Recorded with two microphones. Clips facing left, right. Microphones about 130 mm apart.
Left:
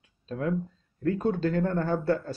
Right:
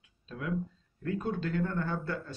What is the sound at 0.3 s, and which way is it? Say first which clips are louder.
Speech: left 6 dB; 40° left (ahead or behind).